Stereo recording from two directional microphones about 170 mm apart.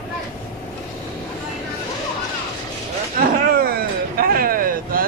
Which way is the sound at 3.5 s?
60° right (ahead or behind).